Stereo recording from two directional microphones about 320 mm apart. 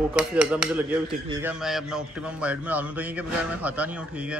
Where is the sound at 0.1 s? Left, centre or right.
Centre.